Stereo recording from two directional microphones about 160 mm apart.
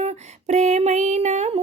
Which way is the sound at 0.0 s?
45° right (ahead or behind).